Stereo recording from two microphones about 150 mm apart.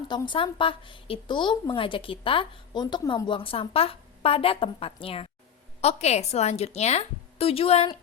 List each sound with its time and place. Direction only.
0.1 s a woman's voice: 30° left (ahead or behind)